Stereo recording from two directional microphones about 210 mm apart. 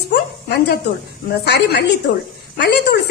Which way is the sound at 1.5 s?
50° left (ahead or behind).